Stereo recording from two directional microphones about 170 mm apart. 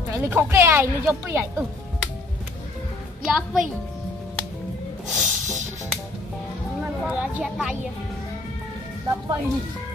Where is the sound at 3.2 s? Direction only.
5° right (ahead or behind).